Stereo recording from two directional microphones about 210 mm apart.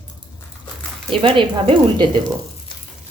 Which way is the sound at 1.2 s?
25° right (ahead or behind).